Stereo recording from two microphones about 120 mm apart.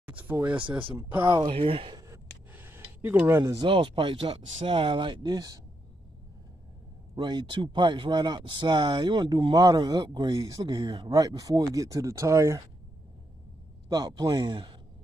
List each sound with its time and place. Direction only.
0.0 s a sound: 10° right (ahead or behind)
1.2 s speech: 45° right (ahead or behind)
2.5 s a sound: 20° right (ahead or behind)
3.6 s speech: 45° right (ahead or behind)
7.2 s speech: 40° right (ahead or behind)
13.8 s speech: 30° right (ahead or behind)